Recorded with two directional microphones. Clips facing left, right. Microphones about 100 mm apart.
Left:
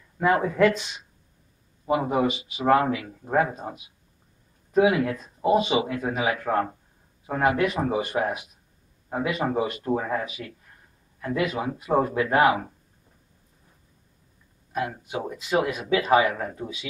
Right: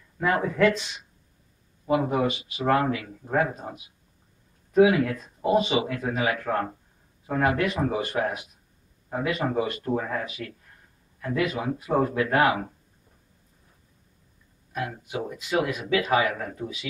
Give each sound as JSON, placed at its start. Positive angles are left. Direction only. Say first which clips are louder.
{"t": 0.2, "sound": "speech", "louder": "left 2 dB", "side_deg": 10}
{"t": 1.9, "sound": "speech", "louder": "left 1 dB", "side_deg": 15}
{"t": 14.8, "sound": "a man's voice", "louder": "left 2 dB", "side_deg": 25}